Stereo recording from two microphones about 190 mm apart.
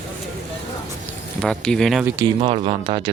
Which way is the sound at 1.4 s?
5° left (ahead or behind).